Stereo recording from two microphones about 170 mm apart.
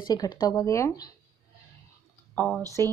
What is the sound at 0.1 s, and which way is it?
Speech, 25° left (ahead or behind).